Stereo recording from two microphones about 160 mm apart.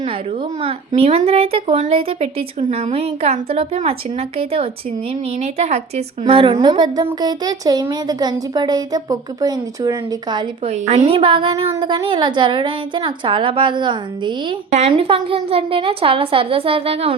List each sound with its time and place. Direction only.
0.6 s a woman's voice: 40° right (ahead or behind)
5.4 s a woman's voice: 45° right (ahead or behind); by 9.9 s 25° right (ahead or behind)
10.8 s a woman's voice: 40° right (ahead or behind)
14.7 s a woman's voice: 40° right (ahead or behind)